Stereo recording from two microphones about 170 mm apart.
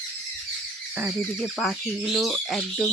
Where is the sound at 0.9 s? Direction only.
5° right (ahead or behind).